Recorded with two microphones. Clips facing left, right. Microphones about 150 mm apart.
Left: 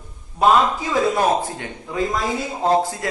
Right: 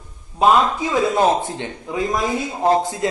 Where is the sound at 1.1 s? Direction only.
20° right (ahead or behind).